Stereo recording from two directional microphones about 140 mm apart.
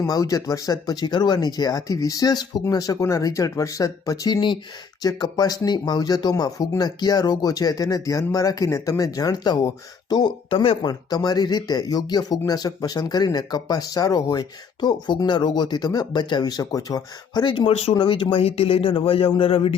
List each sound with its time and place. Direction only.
0.0 s speech: 25° left (ahead or behind); by 10.9 s 40° left (ahead or behind)
11.1 s a man's voice: 30° left (ahead or behind)